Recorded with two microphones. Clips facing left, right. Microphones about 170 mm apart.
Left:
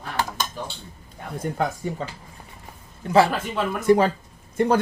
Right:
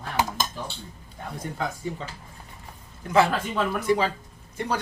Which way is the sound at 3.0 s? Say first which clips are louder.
Left 3 dB; 35° left (ahead or behind).